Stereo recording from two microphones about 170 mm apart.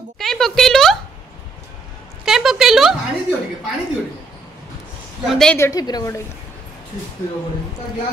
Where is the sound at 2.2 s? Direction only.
Centre (ahead or behind).